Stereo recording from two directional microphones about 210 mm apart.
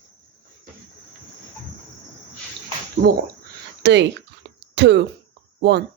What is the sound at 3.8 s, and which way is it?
Speech, 55° right (ahead or behind).